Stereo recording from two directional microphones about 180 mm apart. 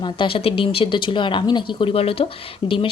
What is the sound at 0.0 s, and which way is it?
Speech, 30° left (ahead or behind).